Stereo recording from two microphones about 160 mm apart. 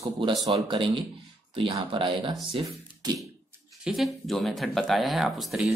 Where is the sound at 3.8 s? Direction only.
Centre (ahead or behind).